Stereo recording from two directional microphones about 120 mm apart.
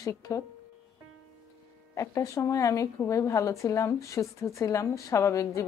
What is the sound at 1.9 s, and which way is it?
Speech, 25° left (ahead or behind).